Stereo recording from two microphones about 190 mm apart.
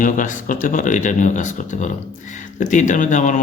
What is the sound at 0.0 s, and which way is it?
Speech, 45° left (ahead or behind).